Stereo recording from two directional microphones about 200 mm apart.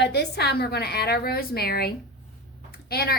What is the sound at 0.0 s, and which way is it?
A woman's voice, 55° left (ahead or behind).